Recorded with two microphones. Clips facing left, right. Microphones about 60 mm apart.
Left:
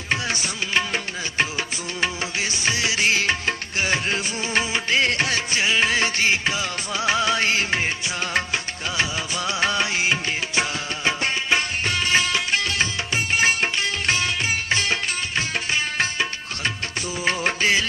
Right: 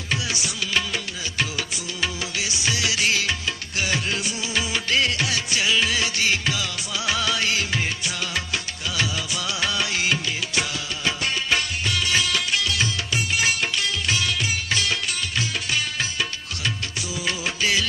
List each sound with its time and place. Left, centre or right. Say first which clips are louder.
0.1 s music: left 3 dB; left
17.2 s music: left 4 dB; left